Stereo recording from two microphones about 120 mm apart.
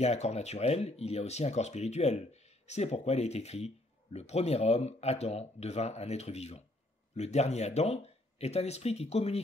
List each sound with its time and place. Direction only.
0.0 s speech: 65° left (ahead or behind)